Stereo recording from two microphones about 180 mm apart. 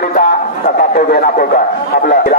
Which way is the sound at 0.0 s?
50° left (ahead or behind).